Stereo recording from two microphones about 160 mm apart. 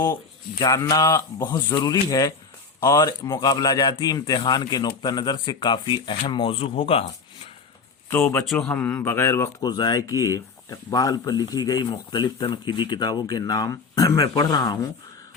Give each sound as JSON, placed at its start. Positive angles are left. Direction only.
{"t": 0.6, "sound": "speech", "side_deg": 20}
{"t": 8.1, "sound": "speech", "side_deg": 15}
{"t": 8.4, "sound": "speech", "side_deg": 5}
{"t": 9.6, "sound": "speech", "side_deg": 25}